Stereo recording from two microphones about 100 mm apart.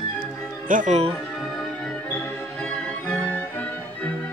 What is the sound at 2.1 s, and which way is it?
Music, 15° left (ahead or behind).